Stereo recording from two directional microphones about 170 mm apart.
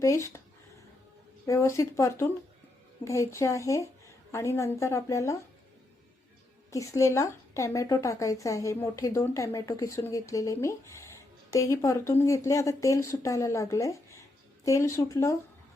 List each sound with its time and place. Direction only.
0.0 s a woman's voice: 15° left (ahead or behind)
1.5 s a woman's voice: 15° left (ahead or behind)
6.7 s a woman's voice: 20° left (ahead or behind)